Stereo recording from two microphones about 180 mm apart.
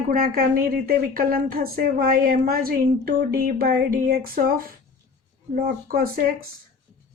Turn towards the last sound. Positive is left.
turn(degrees=-55)  # may be behind; listen again after turning